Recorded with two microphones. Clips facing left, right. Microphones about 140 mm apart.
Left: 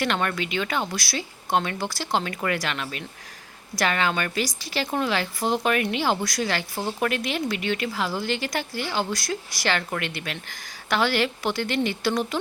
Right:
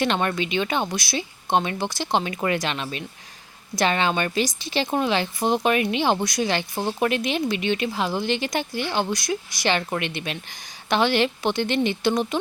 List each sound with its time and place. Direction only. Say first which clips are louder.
0.0 s a woman's voice: right 3 dB; 20° right (ahead or behind)